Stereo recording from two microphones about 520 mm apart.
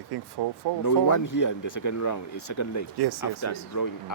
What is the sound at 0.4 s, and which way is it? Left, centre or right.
Speech, right.